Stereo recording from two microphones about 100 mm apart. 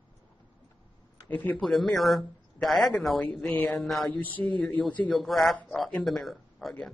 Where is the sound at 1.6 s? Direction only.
5° left (ahead or behind).